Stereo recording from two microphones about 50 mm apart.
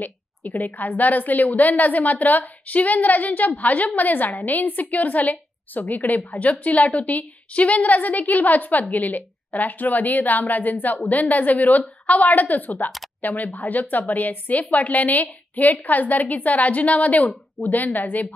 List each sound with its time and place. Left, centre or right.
0.0 s a woman's voice: left